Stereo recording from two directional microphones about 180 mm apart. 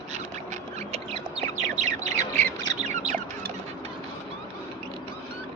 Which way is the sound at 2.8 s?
40° right (ahead or behind).